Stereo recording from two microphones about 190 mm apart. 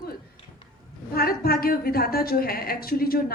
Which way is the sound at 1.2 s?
50° left (ahead or behind).